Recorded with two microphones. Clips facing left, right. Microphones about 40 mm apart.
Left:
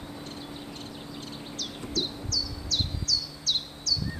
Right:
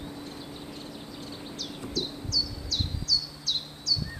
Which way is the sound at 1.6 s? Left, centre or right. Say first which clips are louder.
Left 2 dB; left.